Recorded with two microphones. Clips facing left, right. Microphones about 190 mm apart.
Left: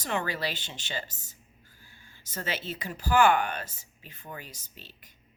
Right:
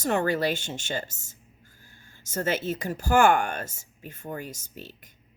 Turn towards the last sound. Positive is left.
turn(degrees=-50)  # may be behind; listen again after turning